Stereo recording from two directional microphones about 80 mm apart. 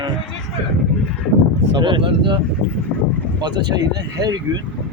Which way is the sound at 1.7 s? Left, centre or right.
Right.